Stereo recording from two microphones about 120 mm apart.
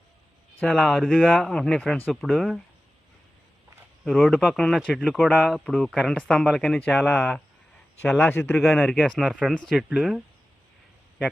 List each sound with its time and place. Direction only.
0.6 s speech: 5° left (ahead or behind)
4.0 s speech: centre (ahead or behind)
4.9 s speech: 5° right (ahead or behind)
5.3 s speech: 5° left (ahead or behind)
8.5 s speech: centre (ahead or behind)